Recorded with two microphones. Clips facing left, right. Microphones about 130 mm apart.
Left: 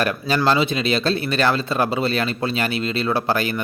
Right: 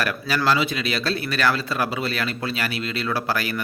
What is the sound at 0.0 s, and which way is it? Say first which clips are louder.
Speech: left 3 dB; 25° left (ahead or behind).